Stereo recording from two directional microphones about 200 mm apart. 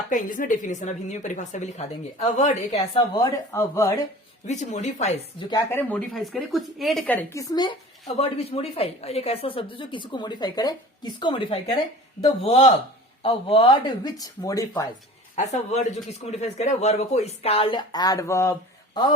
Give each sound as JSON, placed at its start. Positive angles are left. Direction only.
{"t": 0.1, "sound": "a woman's voice", "side_deg": 40}
{"t": 2.7, "sound": "speech", "side_deg": 20}
{"t": 4.4, "sound": "a woman's voice", "side_deg": 35}
{"t": 5.5, "sound": "speech", "side_deg": 15}
{"t": 6.1, "sound": "speech", "side_deg": 0}
{"t": 8.0, "sound": "a woman's voice", "side_deg": 30}
{"t": 15.4, "sound": "a woman's voice", "side_deg": 35}